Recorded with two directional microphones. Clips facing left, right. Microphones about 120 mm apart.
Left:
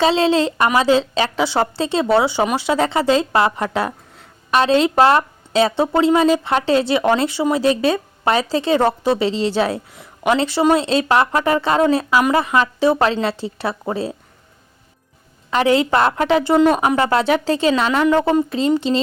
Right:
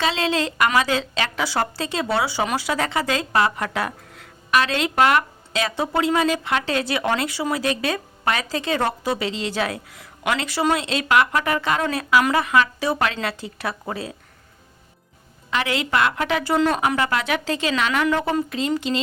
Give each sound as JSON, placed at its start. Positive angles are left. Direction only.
{"t": 0.0, "sound": "a woman's voice", "side_deg": 30}
{"t": 15.4, "sound": "a woman's voice", "side_deg": 30}